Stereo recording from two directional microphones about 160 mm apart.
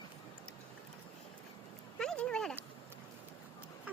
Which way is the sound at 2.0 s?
5° left (ahead or behind).